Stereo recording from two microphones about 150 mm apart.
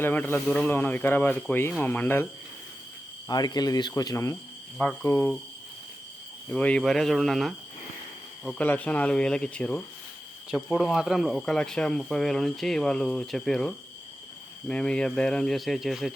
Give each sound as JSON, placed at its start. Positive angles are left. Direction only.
{"t": 0.0, "sound": "speech", "side_deg": 15}
{"t": 3.2, "sound": "speech", "side_deg": 25}
{"t": 4.8, "sound": "speech", "side_deg": 10}
{"t": 6.5, "sound": "speech", "side_deg": 10}